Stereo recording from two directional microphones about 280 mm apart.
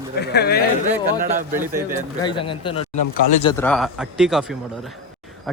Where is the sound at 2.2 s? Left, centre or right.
Centre.